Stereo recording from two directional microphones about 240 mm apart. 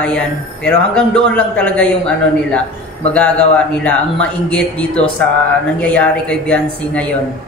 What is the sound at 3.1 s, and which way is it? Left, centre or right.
A man's voice, centre.